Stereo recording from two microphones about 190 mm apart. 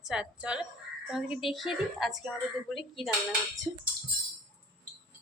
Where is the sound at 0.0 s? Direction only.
5° right (ahead or behind).